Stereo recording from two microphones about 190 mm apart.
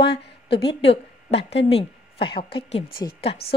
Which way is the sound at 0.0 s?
60° left (ahead or behind).